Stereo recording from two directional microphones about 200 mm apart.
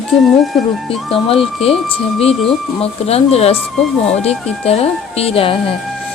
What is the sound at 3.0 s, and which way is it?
Speech, 30° left (ahead or behind).